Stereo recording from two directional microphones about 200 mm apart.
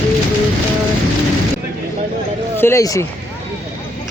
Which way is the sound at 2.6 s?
15° left (ahead or behind).